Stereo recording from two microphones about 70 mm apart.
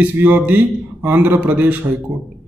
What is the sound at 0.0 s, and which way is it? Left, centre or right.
Speech, right.